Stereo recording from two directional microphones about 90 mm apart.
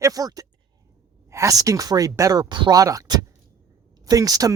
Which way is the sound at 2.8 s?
40° right (ahead or behind).